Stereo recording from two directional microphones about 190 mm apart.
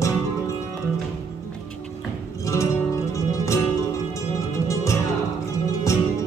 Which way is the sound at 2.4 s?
15° left (ahead or behind).